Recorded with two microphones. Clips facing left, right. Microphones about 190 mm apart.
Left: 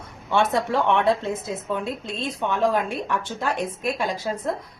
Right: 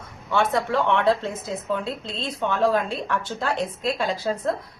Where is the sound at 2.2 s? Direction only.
15° left (ahead or behind).